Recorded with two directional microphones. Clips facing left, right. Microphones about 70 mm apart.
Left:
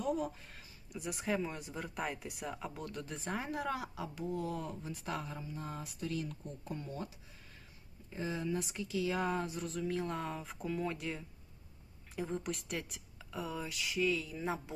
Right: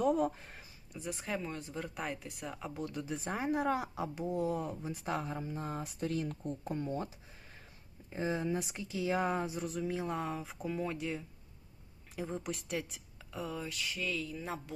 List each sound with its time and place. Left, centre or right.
0.0 s a sound: right
0.9 s speech: centre; by 5.4 s right
5.4 s speech: right
8.1 s speech: right; by 14.8 s centre